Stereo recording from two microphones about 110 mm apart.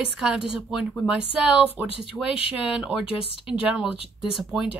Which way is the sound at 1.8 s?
55° left (ahead or behind).